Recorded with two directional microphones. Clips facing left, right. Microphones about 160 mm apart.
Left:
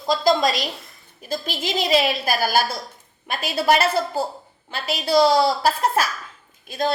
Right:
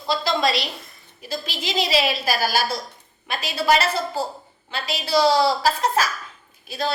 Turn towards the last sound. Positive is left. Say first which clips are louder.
# left 3 dB
turn(degrees=50)  # may be behind; listen again after turning